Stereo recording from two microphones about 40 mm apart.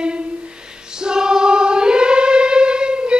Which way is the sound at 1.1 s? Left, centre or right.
Centre.